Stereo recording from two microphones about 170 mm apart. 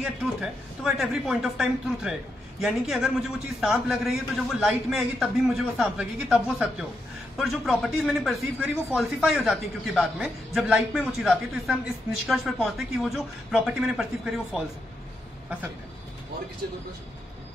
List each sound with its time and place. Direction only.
0.0 s speech: centre (ahead or behind)